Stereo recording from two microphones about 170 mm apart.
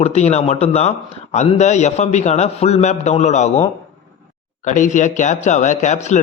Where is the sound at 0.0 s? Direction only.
40° left (ahead or behind).